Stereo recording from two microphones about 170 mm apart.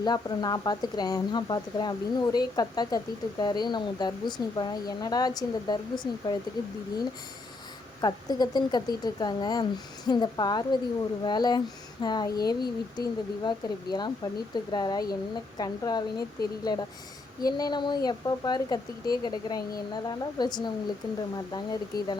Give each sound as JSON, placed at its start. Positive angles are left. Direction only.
{"t": 0.0, "sound": "speech", "side_deg": 25}
{"t": 8.0, "sound": "speech", "side_deg": 25}